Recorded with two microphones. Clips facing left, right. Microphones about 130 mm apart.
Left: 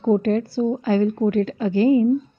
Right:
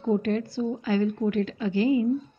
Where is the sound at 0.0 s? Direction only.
40° left (ahead or behind).